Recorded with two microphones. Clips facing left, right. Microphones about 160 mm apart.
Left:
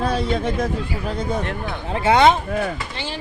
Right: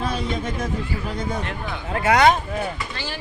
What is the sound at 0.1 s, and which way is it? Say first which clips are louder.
Speech: left 4 dB; 30° left (ahead or behind).